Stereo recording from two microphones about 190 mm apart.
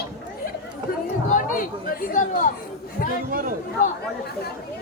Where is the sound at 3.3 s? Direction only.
45° right (ahead or behind).